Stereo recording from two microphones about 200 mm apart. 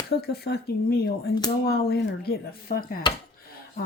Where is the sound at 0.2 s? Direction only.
50° left (ahead or behind).